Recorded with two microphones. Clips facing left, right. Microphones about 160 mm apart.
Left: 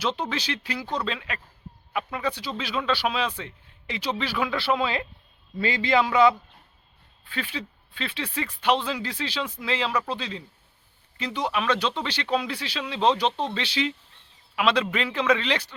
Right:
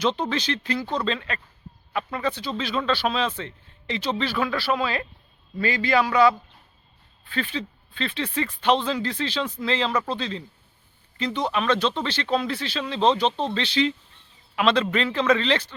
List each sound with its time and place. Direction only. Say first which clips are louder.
0.0 s speech: right 4 dB; 5° left (ahead or behind)
7.3 s speech: right 4 dB; 10° left (ahead or behind)